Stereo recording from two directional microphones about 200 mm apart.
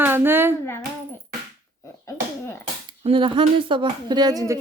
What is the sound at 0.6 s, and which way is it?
Speech, 10° left (ahead or behind).